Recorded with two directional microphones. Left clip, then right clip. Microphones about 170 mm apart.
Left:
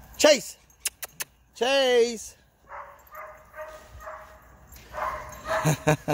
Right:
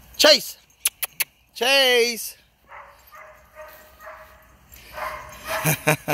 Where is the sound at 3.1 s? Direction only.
45° right (ahead or behind).